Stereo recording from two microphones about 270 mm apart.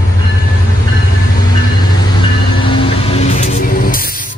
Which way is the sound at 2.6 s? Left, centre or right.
Centre.